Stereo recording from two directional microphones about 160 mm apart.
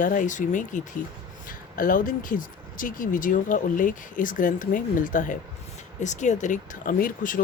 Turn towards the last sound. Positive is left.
turn(degrees=55)  # may be behind; listen again after turning